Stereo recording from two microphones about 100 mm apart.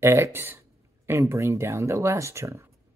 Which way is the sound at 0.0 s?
25° right (ahead or behind).